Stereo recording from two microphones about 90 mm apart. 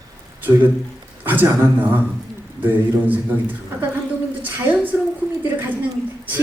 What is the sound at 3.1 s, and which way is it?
Speech, 20° right (ahead or behind).